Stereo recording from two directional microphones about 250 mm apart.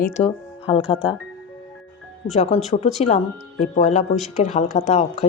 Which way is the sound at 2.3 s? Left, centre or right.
Left.